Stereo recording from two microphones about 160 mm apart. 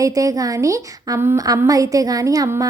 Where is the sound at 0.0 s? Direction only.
20° right (ahead or behind).